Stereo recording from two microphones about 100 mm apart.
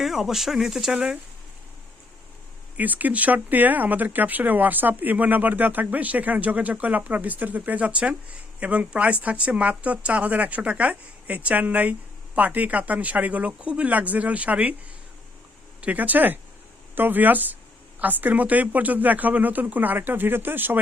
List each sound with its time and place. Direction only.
0.0 s speech: 5° right (ahead or behind)
2.7 s speech: 15° right (ahead or behind)
15.8 s speech: 15° right (ahead or behind)